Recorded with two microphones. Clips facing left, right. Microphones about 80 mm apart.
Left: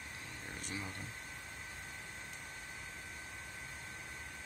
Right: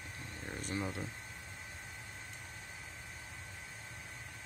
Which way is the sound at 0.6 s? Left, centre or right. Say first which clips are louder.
Right 6 dB; right.